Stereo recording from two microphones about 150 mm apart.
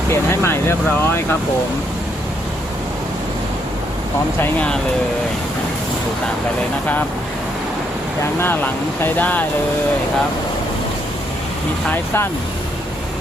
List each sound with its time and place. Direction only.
0.1 s speech: 15° left (ahead or behind)
8.4 s speech: 15° left (ahead or behind)
11.9 s speech: 15° left (ahead or behind)